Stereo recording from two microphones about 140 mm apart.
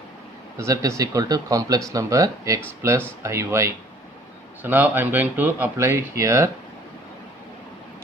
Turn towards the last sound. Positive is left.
turn(degrees=-20)  # may be behind; listen again after turning